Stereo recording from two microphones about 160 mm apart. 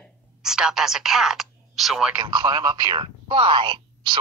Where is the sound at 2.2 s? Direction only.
30° right (ahead or behind).